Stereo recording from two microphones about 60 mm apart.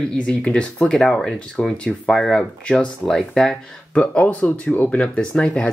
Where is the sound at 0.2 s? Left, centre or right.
Centre.